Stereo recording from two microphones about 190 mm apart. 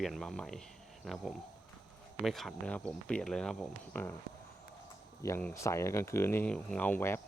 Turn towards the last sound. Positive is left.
turn(degrees=10)  # may be behind; listen again after turning